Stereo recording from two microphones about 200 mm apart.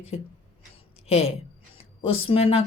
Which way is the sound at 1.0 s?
30° left (ahead or behind).